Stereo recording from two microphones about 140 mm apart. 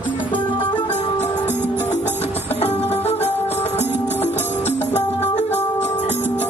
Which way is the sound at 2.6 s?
50° left (ahead or behind).